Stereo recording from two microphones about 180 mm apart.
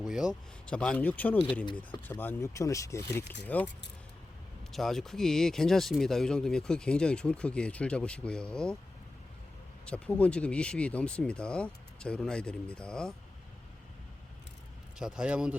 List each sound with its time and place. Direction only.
0.0 s speech: 5° right (ahead or behind)
4.7 s speech: centre (ahead or behind)
9.8 s speech: 5° left (ahead or behind)
14.9 s speech: 5° right (ahead or behind)